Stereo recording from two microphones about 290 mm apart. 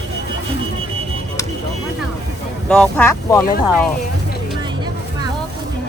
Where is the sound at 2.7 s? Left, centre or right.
Centre.